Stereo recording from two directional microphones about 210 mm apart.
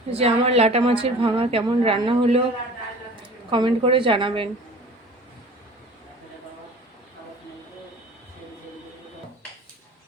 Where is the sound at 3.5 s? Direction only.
25° right (ahead or behind).